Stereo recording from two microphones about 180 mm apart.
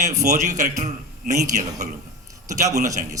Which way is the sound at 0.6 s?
40° right (ahead or behind).